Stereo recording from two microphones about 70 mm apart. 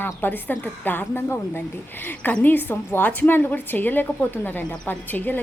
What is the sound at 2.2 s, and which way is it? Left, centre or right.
A woman's voice, left.